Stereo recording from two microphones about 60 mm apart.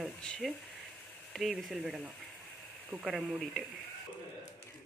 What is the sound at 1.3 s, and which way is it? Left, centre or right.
Speech, centre.